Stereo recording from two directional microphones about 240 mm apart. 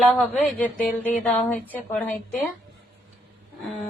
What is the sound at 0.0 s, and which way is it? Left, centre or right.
Speech, centre.